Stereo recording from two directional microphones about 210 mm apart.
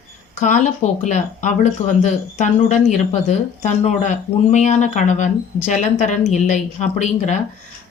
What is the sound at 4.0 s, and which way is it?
Speech, 35° left (ahead or behind).